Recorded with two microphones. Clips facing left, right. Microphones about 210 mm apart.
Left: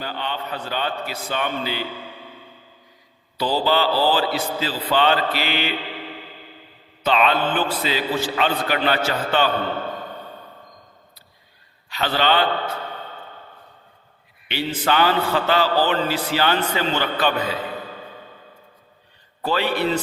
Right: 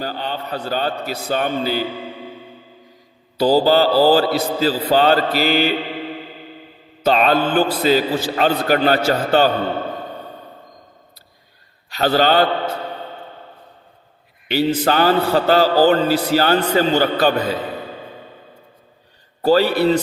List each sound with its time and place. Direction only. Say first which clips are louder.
0.0 s a man's voice: right 3 dB; 40° right (ahead or behind)
3.3 s a man's voice: right 7 dB; 40° right (ahead or behind)
7.0 s a man's voice: right 4 dB; 40° right (ahead or behind)
11.9 s a man's voice: right 5 dB; 40° right (ahead or behind)
14.4 s a man's voice: right 7 dB; 40° right (ahead or behind)
19.4 s a man's voice: right 7 dB; 40° right (ahead or behind)